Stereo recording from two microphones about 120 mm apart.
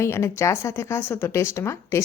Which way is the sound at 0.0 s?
20° left (ahead or behind).